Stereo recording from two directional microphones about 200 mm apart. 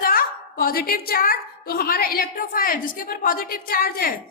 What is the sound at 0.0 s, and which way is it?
A woman's voice, 45° left (ahead or behind).